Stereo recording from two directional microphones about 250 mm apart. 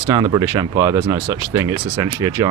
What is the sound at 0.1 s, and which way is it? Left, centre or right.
Speech, centre.